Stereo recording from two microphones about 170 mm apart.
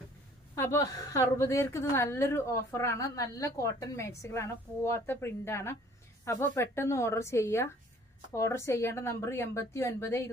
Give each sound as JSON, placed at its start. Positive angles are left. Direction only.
{"t": 0.5, "sound": "a woman's voice", "side_deg": 15}